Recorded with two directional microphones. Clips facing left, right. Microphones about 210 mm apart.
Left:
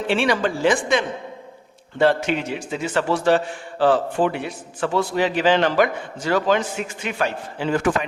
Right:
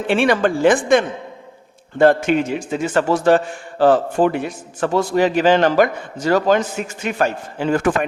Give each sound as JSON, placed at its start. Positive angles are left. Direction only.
{"t": 0.1, "sound": "a man's voice", "side_deg": -50}